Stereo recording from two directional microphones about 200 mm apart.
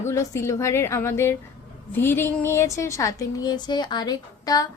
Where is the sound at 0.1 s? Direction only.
15° left (ahead or behind).